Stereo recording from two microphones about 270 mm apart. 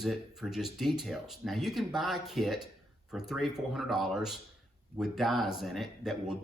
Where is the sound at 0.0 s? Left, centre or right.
Centre.